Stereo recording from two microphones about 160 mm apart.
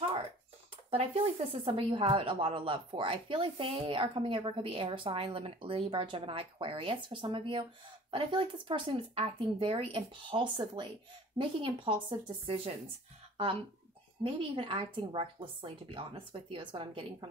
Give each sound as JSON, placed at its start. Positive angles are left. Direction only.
{"t": 0.8, "sound": "speech", "side_deg": -40}
{"t": 14.2, "sound": "speech", "side_deg": -35}